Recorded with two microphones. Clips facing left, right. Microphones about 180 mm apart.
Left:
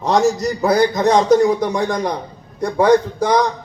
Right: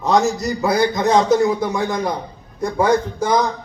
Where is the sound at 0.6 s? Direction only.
40° left (ahead or behind).